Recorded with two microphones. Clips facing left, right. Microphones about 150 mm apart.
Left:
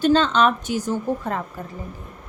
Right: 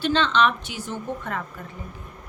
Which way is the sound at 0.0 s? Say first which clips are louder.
Left 4 dB; 40° left (ahead or behind).